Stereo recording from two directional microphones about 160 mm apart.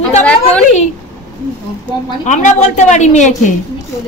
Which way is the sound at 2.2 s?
50° left (ahead or behind).